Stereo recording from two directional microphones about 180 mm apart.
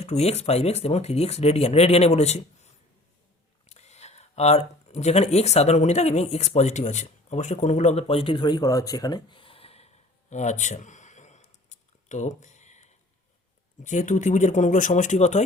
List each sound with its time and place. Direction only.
0.0 s speech: 35° left (ahead or behind)